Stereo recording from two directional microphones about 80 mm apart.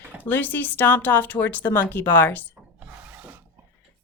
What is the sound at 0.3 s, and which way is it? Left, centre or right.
Speech, left.